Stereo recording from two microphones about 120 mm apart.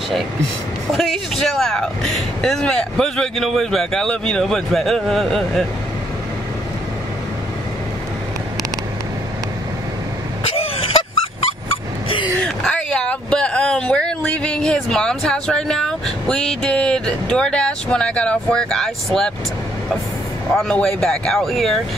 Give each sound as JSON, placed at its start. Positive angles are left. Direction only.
{"t": 0.9, "sound": "speech", "side_deg": 0}
{"t": 10.4, "sound": "cough", "side_deg": 55}
{"t": 12.4, "sound": "a sound", "side_deg": 5}
{"t": 20.5, "sound": "speech", "side_deg": 5}